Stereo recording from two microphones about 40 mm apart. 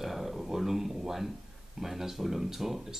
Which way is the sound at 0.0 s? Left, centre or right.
Centre.